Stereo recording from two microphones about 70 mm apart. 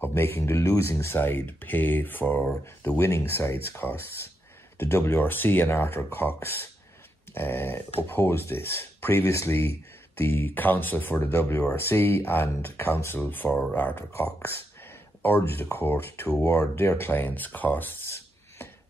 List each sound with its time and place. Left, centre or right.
0.0 s speech: left